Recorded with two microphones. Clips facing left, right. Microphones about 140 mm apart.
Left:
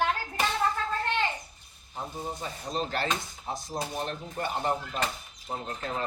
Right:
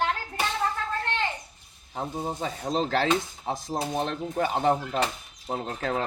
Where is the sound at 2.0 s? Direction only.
70° right (ahead or behind).